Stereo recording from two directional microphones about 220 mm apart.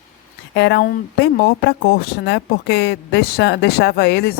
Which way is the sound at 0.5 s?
50° left (ahead or behind).